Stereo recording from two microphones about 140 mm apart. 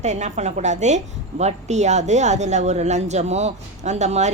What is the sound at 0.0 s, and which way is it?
A woman's voice, 55° right (ahead or behind).